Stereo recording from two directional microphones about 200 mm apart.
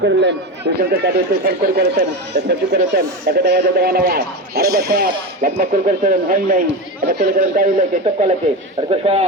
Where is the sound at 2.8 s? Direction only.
45° right (ahead or behind).